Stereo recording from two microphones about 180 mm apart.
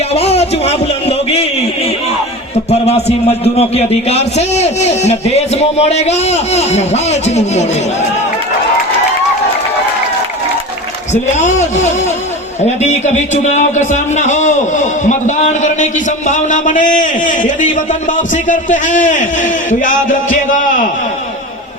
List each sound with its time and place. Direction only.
0.1 s a sound: 35° left (ahead or behind)
2.6 s a man's voice: 35° left (ahead or behind)
11.1 s a man's voice: 40° left (ahead or behind)